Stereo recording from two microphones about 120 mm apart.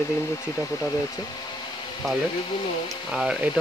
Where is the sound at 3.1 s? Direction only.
5° right (ahead or behind).